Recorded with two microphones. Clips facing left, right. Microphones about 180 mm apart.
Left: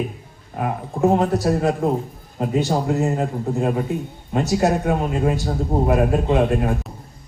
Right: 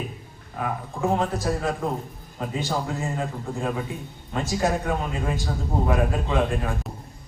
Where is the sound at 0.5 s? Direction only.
40° left (ahead or behind).